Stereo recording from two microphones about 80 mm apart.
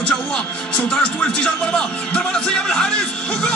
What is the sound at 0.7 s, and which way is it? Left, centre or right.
Music, centre.